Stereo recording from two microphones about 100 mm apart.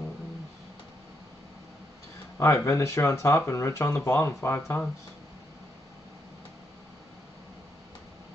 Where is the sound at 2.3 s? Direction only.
30° left (ahead or behind).